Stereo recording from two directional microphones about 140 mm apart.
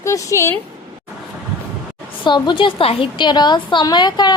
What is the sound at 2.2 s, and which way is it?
A woman's voice, 35° left (ahead or behind).